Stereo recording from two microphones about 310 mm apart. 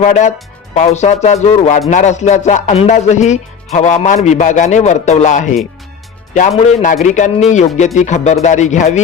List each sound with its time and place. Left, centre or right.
0.0 s speech: left
6.7 s speech: left